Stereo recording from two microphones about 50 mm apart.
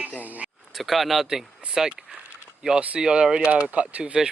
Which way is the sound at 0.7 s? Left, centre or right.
Centre.